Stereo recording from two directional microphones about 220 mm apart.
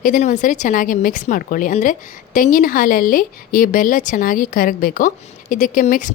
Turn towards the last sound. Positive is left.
turn(degrees=35)  # may be behind; listen again after turning